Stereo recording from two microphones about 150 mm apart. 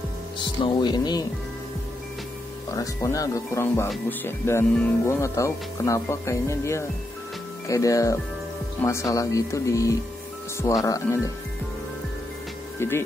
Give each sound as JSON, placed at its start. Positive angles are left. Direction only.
{"t": 0.6, "sound": "speech", "side_deg": 30}
{"t": 2.7, "sound": "speech", "side_deg": 20}
{"t": 12.7, "sound": "speech", "side_deg": 15}